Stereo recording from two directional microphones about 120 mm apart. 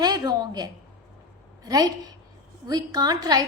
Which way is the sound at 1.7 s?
35° right (ahead or behind).